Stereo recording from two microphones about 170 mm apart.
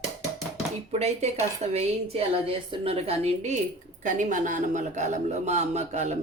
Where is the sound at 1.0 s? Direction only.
40° right (ahead or behind).